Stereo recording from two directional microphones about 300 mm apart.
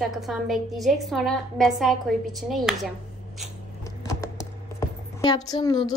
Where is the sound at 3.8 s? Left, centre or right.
Centre.